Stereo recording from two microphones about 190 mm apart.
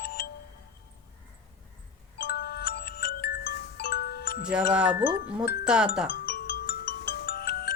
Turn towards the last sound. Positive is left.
turn(degrees=55)  # may be behind; listen again after turning